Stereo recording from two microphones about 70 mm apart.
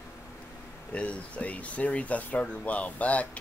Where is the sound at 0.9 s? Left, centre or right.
Centre.